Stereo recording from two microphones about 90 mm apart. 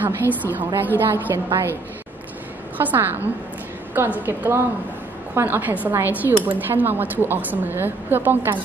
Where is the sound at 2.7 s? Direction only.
20° right (ahead or behind).